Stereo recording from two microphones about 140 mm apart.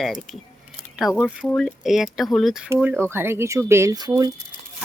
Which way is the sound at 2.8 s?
15° right (ahead or behind).